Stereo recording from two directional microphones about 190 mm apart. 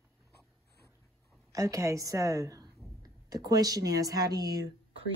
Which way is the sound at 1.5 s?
15° right (ahead or behind).